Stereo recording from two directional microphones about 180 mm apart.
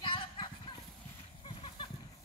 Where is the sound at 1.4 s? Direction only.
30° left (ahead or behind).